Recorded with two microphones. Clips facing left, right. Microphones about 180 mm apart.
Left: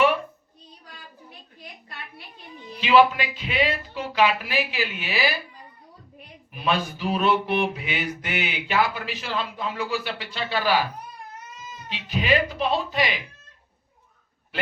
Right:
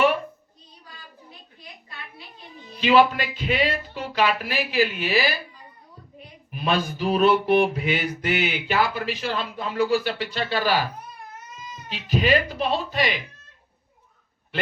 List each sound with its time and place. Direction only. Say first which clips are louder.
2.8 s mantra: even; 40° right (ahead or behind)
6.7 s mantra: right 2 dB; 40° right (ahead or behind)
11.9 s mantra: right 2 dB; 40° right (ahead or behind)